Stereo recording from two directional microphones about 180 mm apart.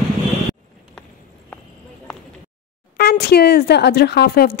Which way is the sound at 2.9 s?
60° left (ahead or behind).